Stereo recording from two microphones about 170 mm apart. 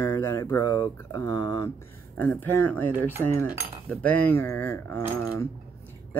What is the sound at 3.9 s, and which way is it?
Speech, 15° left (ahead or behind).